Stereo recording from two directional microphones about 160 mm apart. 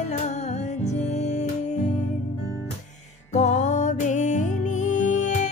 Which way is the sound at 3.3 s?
45° left (ahead or behind).